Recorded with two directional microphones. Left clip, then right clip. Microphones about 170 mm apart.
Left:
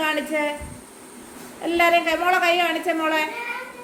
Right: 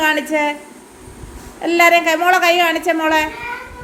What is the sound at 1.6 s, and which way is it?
A woman's voice, 35° right (ahead or behind).